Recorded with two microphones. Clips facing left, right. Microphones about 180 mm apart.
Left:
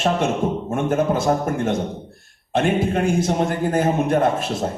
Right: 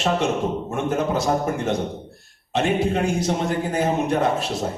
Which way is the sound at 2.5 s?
50° left (ahead or behind).